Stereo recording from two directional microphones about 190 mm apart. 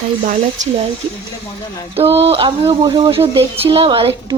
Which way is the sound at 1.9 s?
30° right (ahead or behind).